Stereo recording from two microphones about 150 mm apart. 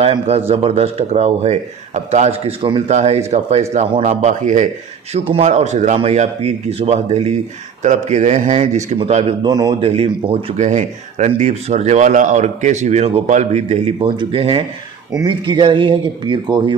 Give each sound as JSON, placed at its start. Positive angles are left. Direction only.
{"t": 0.0, "sound": "speech", "side_deg": -40}
{"t": 5.1, "sound": "speech", "side_deg": -40}
{"t": 8.9, "sound": "speech", "side_deg": -40}
{"t": 9.5, "sound": "speech", "side_deg": -25}
{"t": 9.8, "sound": "speech", "side_deg": -40}
{"t": 13.9, "sound": "speech", "side_deg": -35}